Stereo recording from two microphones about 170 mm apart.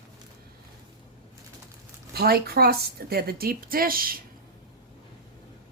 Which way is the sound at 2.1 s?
65° right (ahead or behind).